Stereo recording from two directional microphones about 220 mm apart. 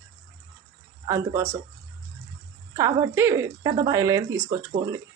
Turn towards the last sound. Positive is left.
turn(degrees=-15)  # may be behind; listen again after turning